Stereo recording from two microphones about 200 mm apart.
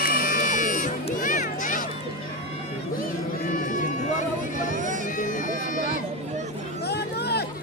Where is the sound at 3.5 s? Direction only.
40° left (ahead or behind).